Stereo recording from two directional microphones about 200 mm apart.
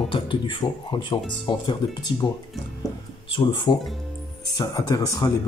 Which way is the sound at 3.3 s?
25° left (ahead or behind).